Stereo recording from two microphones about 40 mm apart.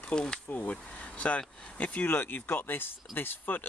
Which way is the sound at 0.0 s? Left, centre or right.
Left.